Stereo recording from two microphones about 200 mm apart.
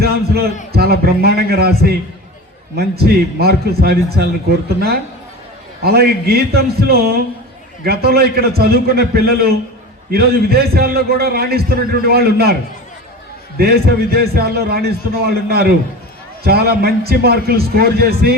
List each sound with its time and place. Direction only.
0.0 s a sound: 50° right (ahead or behind)
0.7 s a man's voice: 50° right (ahead or behind)
5.8 s a man's voice: 50° right (ahead or behind)
13.6 s a man's voice: 50° right (ahead or behind)